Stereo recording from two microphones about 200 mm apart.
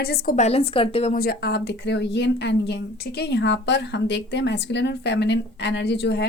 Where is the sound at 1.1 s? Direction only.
50° left (ahead or behind).